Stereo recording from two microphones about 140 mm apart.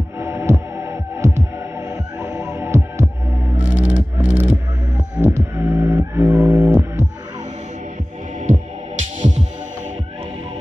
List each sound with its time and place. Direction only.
0.2 s heart sounds: 20° right (ahead or behind)
1.9 s music: 25° right (ahead or behind)
2.3 s music: 10° right (ahead or behind)
3.5 s a sound: 10° right (ahead or behind)
5.2 s music: 15° right (ahead or behind)